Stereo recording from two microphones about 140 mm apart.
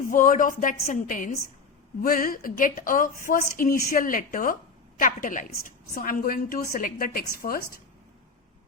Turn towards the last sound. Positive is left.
turn(degrees=90)